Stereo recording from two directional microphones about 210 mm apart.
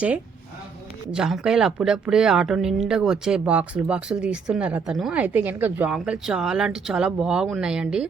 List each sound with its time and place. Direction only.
1.1 s speech: 5° right (ahead or behind)